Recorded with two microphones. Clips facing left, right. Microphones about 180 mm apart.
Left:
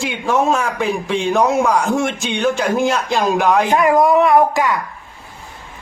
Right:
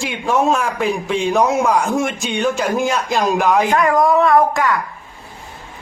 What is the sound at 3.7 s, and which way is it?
Speech, 20° left (ahead or behind).